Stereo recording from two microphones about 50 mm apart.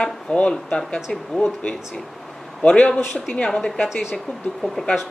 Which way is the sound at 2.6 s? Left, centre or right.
Left.